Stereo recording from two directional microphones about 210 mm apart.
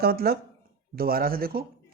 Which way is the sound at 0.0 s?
45° right (ahead or behind).